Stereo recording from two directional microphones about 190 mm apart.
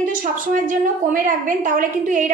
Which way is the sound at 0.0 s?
45° right (ahead or behind).